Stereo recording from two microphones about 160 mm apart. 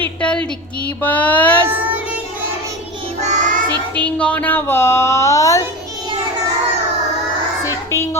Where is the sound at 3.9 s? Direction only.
10° left (ahead or behind).